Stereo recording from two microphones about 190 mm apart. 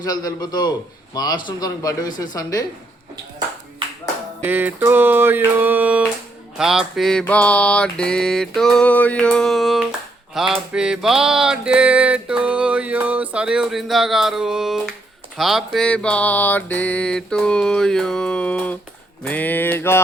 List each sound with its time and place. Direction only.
0.0 s speech: 20° left (ahead or behind)
4.4 s a sound: 10° right (ahead or behind)
6.6 s music: centre (ahead or behind)
19.2 s mantra: 10° left (ahead or behind)